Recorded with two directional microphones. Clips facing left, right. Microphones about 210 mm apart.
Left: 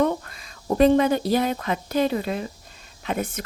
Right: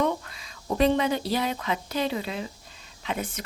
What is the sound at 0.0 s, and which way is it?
Speech, 45° left (ahead or behind).